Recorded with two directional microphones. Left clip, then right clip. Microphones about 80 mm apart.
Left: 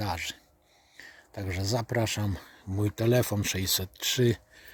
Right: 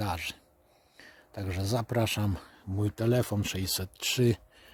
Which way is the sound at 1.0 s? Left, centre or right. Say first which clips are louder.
Left 1 dB; right.